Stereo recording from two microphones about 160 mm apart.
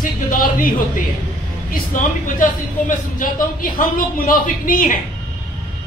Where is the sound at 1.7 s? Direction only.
60° left (ahead or behind).